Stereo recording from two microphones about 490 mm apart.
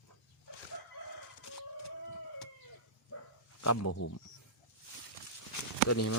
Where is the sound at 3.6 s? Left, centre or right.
Left.